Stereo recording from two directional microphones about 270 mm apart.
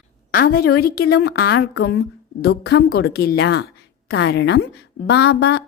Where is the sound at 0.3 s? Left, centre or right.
Left.